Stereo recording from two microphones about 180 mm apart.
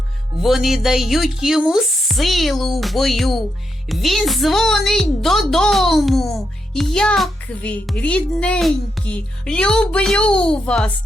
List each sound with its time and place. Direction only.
0.4 s a child's voice: centre (ahead or behind)